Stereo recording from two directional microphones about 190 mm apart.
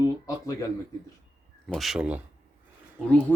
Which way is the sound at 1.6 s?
Centre (ahead or behind).